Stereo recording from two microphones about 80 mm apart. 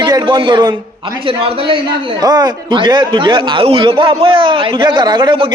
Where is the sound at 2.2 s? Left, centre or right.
Right.